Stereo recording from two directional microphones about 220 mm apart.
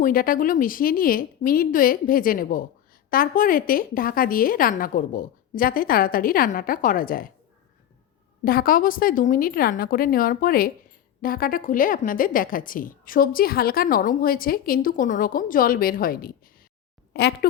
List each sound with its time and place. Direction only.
0.0 s a woman's voice: 40° left (ahead or behind)
8.4 s a woman's voice: 40° left (ahead or behind)